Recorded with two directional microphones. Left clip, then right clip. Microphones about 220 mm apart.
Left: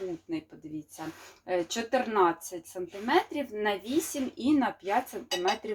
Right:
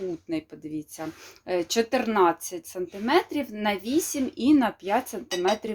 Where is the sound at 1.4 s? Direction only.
45° right (ahead or behind).